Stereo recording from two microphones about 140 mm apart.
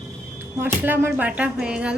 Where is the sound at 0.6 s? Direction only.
15° right (ahead or behind).